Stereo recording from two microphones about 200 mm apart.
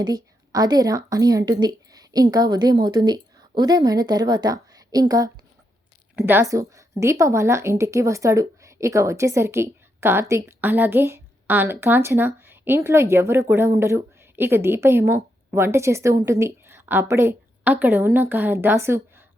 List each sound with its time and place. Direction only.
0.5 s a woman's voice: 20° right (ahead or behind)